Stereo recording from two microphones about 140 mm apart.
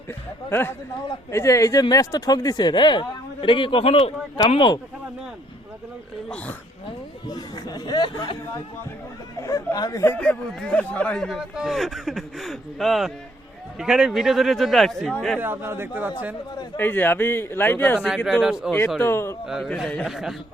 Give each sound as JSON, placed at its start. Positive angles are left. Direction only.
{"t": 0.1, "sound": "a man's voice", "side_deg": 15}
{"t": 6.2, "sound": "a man's voice", "side_deg": 10}
{"t": 7.3, "sound": "speech", "side_deg": 30}
{"t": 9.4, "sound": "speech", "side_deg": 20}
{"t": 15.4, "sound": "a man's voice", "side_deg": -15}
{"t": 16.7, "sound": "a man's voice", "side_deg": 15}
{"t": 18.3, "sound": "speech", "side_deg": -5}
{"t": 18.9, "sound": "a man's voice", "side_deg": 15}
{"t": 19.5, "sound": "speech", "side_deg": -5}